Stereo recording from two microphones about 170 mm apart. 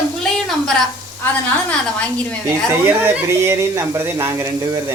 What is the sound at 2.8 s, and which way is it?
Speech, 15° right (ahead or behind).